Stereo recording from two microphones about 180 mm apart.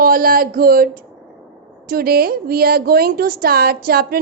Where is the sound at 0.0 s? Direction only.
55° right (ahead or behind).